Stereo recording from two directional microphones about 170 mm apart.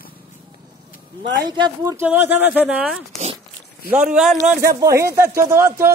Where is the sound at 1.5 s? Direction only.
25° right (ahead or behind).